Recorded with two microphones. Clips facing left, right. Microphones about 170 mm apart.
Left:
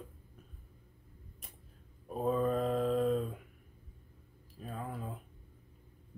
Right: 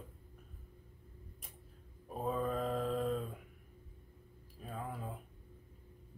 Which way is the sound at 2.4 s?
5° left (ahead or behind).